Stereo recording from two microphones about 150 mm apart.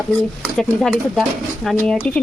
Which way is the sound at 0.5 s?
Centre (ahead or behind).